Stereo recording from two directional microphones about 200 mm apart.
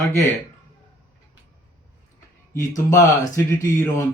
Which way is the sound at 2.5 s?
15° left (ahead or behind).